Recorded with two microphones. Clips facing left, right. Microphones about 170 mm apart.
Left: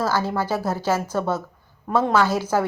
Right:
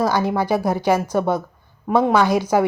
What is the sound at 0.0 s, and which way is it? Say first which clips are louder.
A woman's voice: right 4 dB; 15° right (ahead or behind).